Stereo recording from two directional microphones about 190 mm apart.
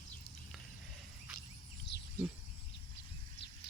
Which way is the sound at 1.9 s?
60° left (ahead or behind).